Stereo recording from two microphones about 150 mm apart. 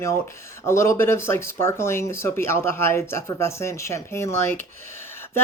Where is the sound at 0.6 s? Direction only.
20° left (ahead or behind).